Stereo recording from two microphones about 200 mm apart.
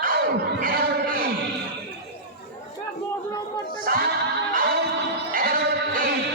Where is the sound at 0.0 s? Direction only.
45° right (ahead or behind).